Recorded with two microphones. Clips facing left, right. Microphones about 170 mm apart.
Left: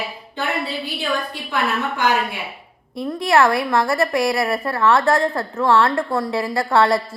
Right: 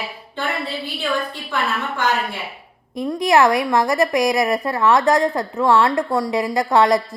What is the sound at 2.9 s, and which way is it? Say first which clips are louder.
A woman's voice: right 1 dB; 15° right (ahead or behind).